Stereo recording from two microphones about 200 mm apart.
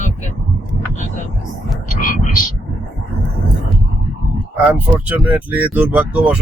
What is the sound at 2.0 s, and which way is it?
Frog, 40° left (ahead or behind).